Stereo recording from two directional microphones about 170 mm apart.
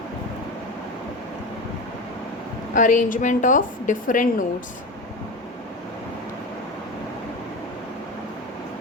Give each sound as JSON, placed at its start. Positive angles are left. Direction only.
{"t": 2.7, "sound": "a woman's voice", "side_deg": 50}